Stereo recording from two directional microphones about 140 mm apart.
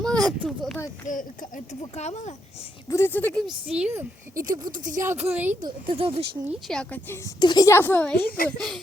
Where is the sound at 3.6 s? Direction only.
5° right (ahead or behind).